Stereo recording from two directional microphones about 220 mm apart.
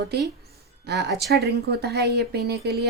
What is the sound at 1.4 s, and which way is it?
Speech, 50° right (ahead or behind).